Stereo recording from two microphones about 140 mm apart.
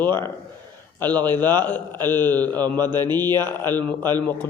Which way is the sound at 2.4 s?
30° right (ahead or behind).